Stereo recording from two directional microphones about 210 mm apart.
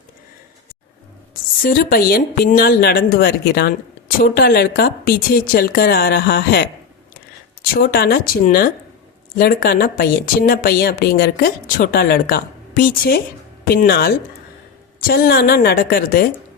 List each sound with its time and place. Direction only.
1.6 s speech: 45° left (ahead or behind)